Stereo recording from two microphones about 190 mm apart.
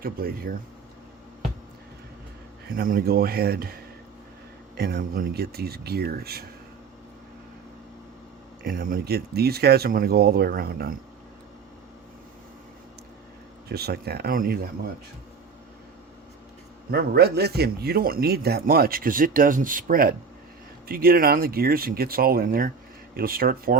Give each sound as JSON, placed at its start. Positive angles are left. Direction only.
{"t": 0.0, "sound": "speech", "side_deg": -50}
{"t": 2.7, "sound": "speech", "side_deg": -50}
{"t": 4.8, "sound": "speech", "side_deg": -55}
{"t": 8.6, "sound": "speech", "side_deg": -50}
{"t": 13.7, "sound": "speech", "side_deg": -55}
{"t": 16.9, "sound": "speech", "side_deg": -55}